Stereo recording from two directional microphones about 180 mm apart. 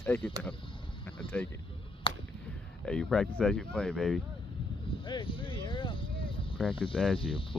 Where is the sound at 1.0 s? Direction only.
5° left (ahead or behind).